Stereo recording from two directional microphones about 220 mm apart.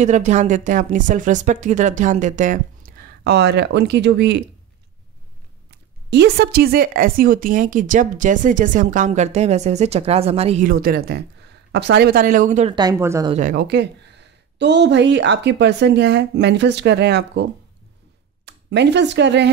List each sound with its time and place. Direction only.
0.0 s speech: 30° right (ahead or behind); by 4.4 s 50° right (ahead or behind)
5.7 s speech: 50° right (ahead or behind); by 12.7 s 35° right (ahead or behind)
12.7 s speech: 15° right (ahead or behind)
13.3 s a woman's voice: 40° right (ahead or behind)